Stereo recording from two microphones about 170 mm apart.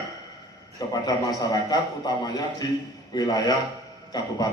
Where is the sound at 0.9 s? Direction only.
25° left (ahead or behind).